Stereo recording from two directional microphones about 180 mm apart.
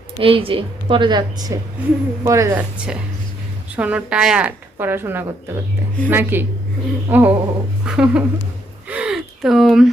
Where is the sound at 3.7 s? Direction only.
5° right (ahead or behind).